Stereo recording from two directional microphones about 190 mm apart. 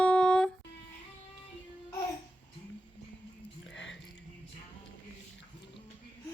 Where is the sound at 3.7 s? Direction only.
75° left (ahead or behind).